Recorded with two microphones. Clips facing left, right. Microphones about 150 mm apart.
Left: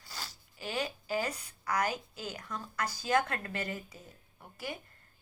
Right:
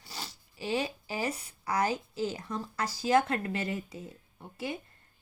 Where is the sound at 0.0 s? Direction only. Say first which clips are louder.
Right 3 dB; 25° right (ahead or behind).